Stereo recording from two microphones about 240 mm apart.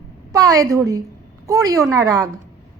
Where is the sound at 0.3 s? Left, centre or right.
Centre.